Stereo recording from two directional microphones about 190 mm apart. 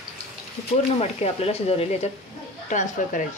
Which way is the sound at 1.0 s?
35° left (ahead or behind).